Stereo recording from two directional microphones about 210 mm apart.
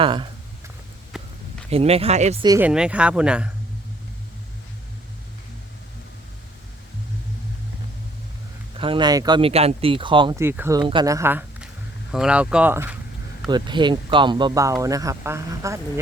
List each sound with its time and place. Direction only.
0.0 s speech: 25° right (ahead or behind)
1.1 s a sound: centre (ahead or behind)
1.7 s speech: 30° right (ahead or behind)
2.4 s speech: 15° right (ahead or behind)
2.6 s speech: 5° right (ahead or behind)
8.8 s speech: 25° right (ahead or behind)
13.5 s speech: 20° right (ahead or behind)